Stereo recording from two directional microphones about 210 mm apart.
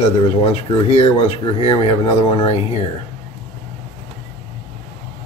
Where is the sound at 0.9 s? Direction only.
30° left (ahead or behind).